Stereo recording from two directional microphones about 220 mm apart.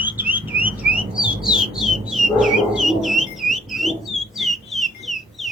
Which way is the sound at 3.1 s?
Centre (ahead or behind).